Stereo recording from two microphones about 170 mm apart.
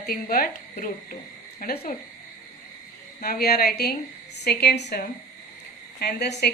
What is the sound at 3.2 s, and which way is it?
Speech, 60° left (ahead or behind).